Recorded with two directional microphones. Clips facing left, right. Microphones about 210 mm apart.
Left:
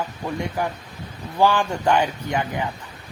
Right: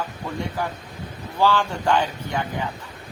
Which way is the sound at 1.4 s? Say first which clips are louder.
Left 2 dB; 15° left (ahead or behind).